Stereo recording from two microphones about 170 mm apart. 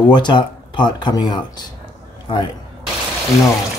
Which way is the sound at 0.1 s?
25° left (ahead or behind).